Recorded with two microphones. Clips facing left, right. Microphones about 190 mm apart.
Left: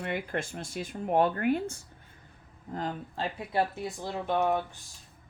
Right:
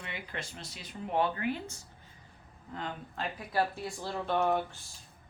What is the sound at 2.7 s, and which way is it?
Speech, 40° left (ahead or behind).